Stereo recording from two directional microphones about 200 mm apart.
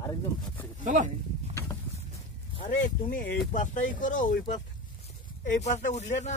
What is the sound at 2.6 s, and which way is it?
Speech, 40° left (ahead or behind).